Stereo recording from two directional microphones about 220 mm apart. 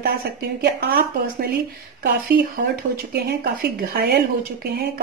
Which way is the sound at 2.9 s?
45° right (ahead or behind).